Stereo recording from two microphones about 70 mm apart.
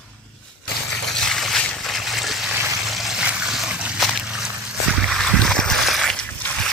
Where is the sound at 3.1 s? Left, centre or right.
Centre.